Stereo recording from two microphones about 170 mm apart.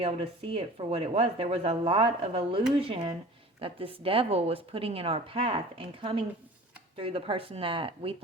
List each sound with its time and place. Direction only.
0.0 s speech: 35° right (ahead or behind)